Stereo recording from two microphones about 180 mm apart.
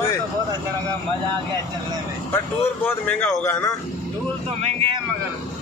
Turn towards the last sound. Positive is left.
turn(degrees=-30)  # may be behind; listen again after turning